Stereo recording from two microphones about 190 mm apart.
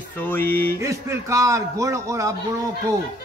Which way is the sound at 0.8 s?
15° right (ahead or behind).